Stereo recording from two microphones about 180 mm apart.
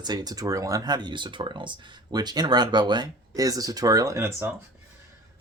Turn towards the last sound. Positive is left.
turn(degrees=-15)  # may be behind; listen again after turning